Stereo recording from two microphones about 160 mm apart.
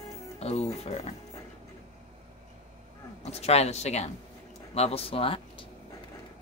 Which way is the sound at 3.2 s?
40° left (ahead or behind).